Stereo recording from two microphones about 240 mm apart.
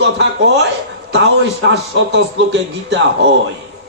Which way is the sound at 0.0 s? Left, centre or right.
Right.